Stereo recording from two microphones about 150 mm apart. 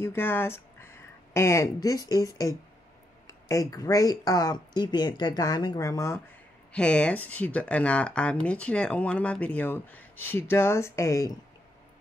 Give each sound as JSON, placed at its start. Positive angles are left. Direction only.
{"t": 0.0, "sound": "speech", "side_deg": 15}
{"t": 6.7, "sound": "speech", "side_deg": 5}